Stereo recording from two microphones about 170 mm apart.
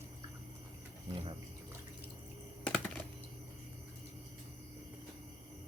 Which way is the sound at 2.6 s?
10° left (ahead or behind).